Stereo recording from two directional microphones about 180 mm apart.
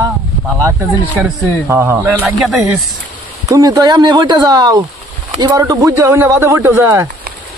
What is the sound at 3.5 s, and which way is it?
Speech, 20° right (ahead or behind).